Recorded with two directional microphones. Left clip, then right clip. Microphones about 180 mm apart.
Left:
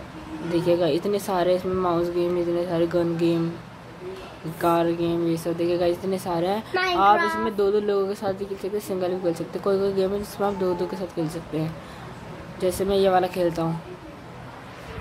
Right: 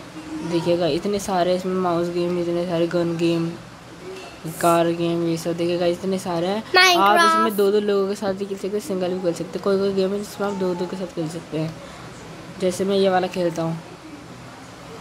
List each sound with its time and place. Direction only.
0.5 s a woman's voice: 5° right (ahead or behind)
4.6 s a woman's voice: 10° right (ahead or behind)
6.7 s speech: 70° right (ahead or behind)
7.4 s a woman's voice: 10° right (ahead or behind)